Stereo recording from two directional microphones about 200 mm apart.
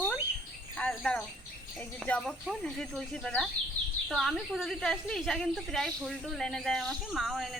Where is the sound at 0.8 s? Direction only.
5° left (ahead or behind).